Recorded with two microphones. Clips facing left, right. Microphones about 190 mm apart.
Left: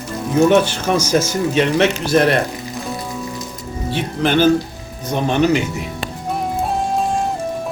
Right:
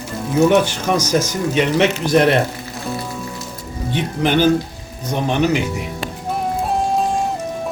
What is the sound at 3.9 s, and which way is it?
A man's voice, 15° right (ahead or behind).